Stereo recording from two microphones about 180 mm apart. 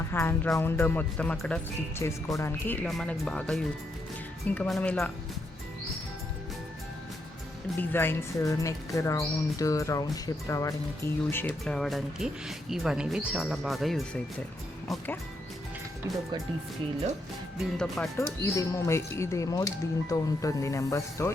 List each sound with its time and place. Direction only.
0.1 s speech: 15° left (ahead or behind)
2.8 s speech: 5° left (ahead or behind)
7.8 s speech: 10° left (ahead or behind)
11.6 s speech: centre (ahead or behind)
16.1 s speech: 15° right (ahead or behind)
17.6 s speech: centre (ahead or behind)
18.2 s speech: 15° left (ahead or behind)